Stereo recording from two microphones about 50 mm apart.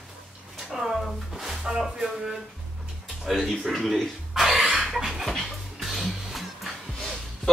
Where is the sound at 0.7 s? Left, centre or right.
Centre.